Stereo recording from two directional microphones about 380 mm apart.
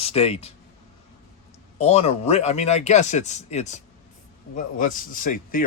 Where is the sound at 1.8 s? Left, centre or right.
Centre.